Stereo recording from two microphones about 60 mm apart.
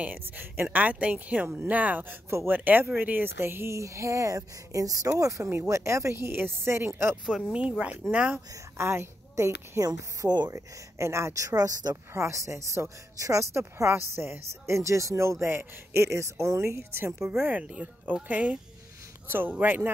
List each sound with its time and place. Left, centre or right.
0.0 s speech: right
2.2 s speech: right
2.5 s speech: right
5.4 s speech: right
5.8 s speech: right
8.1 s speech: right
8.7 s speech: right
10.5 s speech: right
12.1 s speech: right
12.4 s speech: right
14.8 s speech: right
15.4 s speech: right
17.5 s speech: right
19.2 s speech: right